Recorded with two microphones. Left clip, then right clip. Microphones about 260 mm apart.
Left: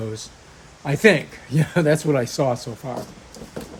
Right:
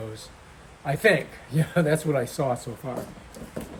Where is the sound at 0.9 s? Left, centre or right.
Left.